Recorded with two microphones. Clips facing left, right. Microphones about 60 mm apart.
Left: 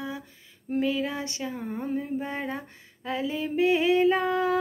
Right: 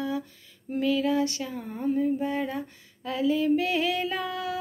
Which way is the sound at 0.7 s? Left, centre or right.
Left.